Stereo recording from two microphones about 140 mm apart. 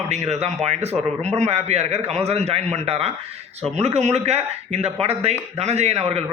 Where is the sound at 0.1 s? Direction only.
50° right (ahead or behind).